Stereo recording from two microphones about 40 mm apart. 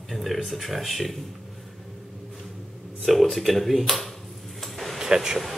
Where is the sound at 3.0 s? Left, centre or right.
Centre.